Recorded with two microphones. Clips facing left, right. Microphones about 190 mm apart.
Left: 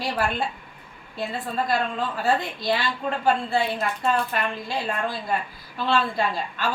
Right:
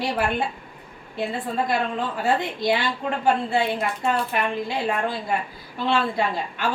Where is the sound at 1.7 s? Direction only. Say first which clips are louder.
Right 1 dB; 20° right (ahead or behind).